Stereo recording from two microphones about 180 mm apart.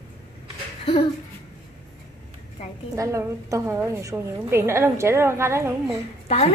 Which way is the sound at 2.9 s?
20° right (ahead or behind).